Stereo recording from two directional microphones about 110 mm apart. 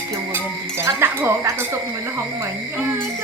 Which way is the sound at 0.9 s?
20° right (ahead or behind).